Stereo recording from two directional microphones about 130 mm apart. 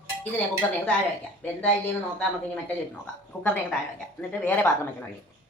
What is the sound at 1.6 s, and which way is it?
Speech, 10° left (ahead or behind).